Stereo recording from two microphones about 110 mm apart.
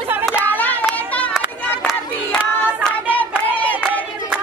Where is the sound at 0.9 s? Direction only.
15° left (ahead or behind).